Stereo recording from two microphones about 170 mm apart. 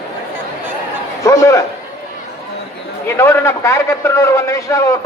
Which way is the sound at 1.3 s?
15° left (ahead or behind).